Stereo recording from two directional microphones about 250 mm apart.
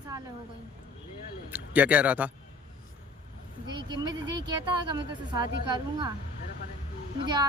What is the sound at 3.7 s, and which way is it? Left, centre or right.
A woman's voice, centre.